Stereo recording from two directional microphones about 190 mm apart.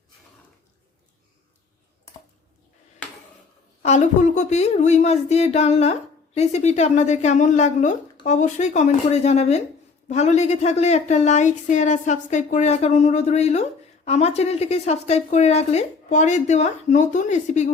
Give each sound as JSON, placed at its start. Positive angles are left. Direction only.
{"t": 3.8, "sound": "a woman's voice", "side_deg": 40}